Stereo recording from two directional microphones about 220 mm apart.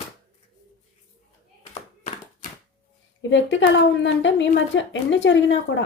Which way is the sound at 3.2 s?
55° left (ahead or behind).